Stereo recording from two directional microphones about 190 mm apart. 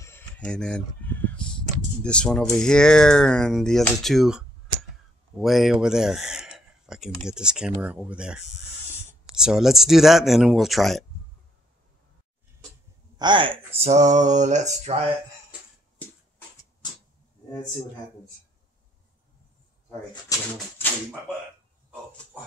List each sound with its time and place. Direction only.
0.0 s a sound: 10° left (ahead or behind)
2.0 s speech: 5° left (ahead or behind)
13.2 s speech: 25° right (ahead or behind)
20.3 s speech: 20° left (ahead or behind)